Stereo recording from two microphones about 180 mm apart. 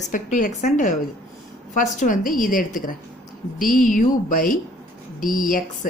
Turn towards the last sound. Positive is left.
turn(degrees=50)  # may be behind; listen again after turning